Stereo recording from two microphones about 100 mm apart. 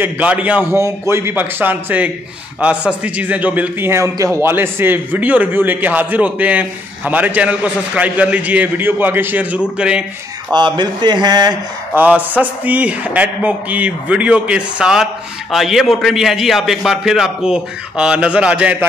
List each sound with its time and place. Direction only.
0.0 s a man's voice: 15° right (ahead or behind)
0.7 s a man's voice: 30° right (ahead or behind); by 10.0 s 10° right (ahead or behind)
10.5 s speech: 50° right (ahead or behind)
11.9 s a man's voice: 15° right (ahead or behind)